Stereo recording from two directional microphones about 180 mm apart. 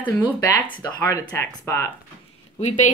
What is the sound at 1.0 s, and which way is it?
Speech, 20° left (ahead or behind).